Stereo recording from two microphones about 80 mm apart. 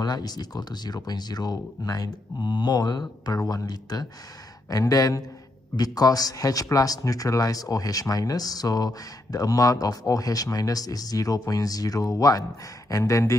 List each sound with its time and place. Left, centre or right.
0.0 s speech: left